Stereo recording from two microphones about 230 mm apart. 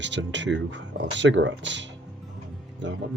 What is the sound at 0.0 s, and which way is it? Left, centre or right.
Speech, right.